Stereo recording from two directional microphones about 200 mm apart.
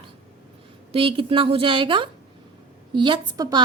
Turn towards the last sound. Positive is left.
turn(degrees=-20)  # may be behind; listen again after turning